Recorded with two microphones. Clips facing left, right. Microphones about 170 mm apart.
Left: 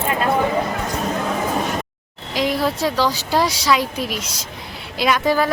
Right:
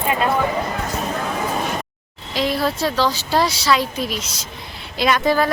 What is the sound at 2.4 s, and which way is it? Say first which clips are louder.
Speech: even; 15° left (ahead or behind).